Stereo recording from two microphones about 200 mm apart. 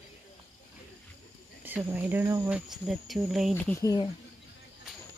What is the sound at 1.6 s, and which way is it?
Speech, 10° right (ahead or behind).